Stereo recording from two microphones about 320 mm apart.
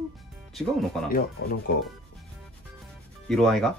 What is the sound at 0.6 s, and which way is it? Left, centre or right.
Speech, centre.